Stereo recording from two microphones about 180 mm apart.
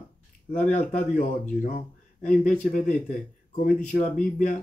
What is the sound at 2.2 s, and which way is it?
Speech, 45° left (ahead or behind).